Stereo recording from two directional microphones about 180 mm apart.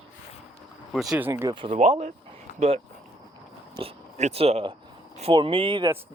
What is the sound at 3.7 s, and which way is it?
Speech, 35° right (ahead or behind).